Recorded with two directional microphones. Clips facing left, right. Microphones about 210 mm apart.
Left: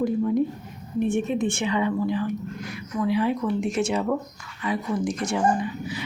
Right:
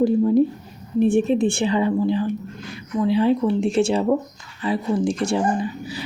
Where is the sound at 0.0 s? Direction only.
30° right (ahead or behind).